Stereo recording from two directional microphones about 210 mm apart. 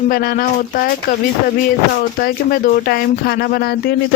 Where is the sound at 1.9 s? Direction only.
45° left (ahead or behind).